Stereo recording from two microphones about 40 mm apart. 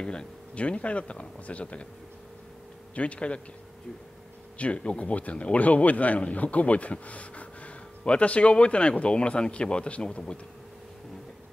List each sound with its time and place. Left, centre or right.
0.0 s speech: left
0.6 s a man's voice: left
2.9 s a man's voice: left
4.6 s a man's voice: left